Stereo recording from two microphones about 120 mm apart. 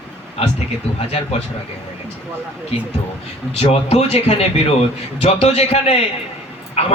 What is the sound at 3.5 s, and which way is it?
A man's voice, 55° left (ahead or behind).